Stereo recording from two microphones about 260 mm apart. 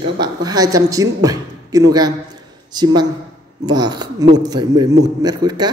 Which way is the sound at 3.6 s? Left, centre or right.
Centre.